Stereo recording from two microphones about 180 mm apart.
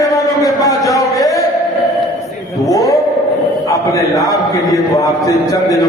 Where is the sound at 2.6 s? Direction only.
20° left (ahead or behind).